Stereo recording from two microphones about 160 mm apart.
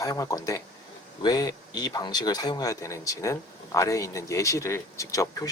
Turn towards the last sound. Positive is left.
turn(degrees=20)  # may be behind; listen again after turning